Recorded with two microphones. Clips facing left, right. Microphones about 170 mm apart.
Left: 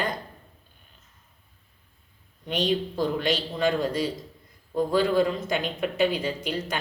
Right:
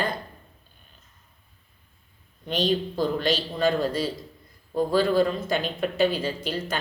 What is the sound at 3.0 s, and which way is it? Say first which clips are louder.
Speech: right 1 dB; 15° left (ahead or behind).